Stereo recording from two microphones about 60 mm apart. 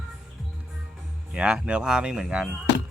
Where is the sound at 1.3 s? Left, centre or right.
Centre.